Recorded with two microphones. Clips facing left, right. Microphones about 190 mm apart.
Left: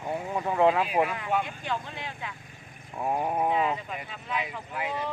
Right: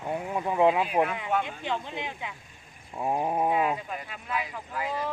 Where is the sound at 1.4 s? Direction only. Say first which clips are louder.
Right 1 dB; 20° right (ahead or behind); by 4.6 s 5° right (ahead or behind).